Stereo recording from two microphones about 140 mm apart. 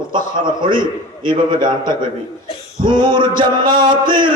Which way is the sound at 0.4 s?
35° right (ahead or behind).